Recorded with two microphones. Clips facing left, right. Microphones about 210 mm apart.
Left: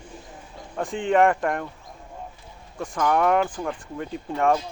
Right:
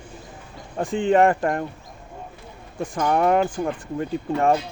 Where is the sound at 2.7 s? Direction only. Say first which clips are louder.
Right 1 dB; 30° right (ahead or behind).